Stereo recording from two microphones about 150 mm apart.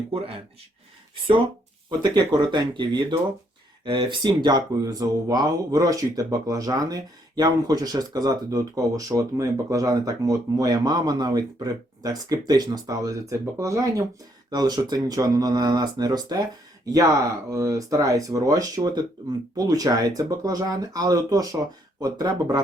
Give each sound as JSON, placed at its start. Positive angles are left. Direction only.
{"t": 1.9, "sound": "speech", "side_deg": -30}